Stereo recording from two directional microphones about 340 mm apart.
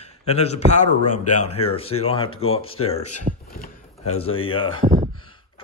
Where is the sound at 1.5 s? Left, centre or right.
Centre.